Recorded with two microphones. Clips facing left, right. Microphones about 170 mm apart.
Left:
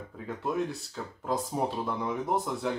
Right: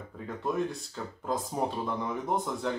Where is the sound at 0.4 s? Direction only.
Centre (ahead or behind).